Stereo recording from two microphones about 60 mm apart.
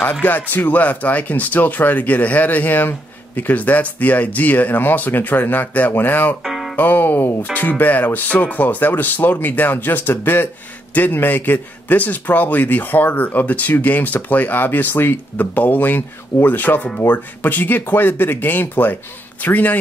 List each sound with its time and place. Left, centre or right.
0.0 s speech: left
6.4 s music: centre
6.8 s a man's voice: left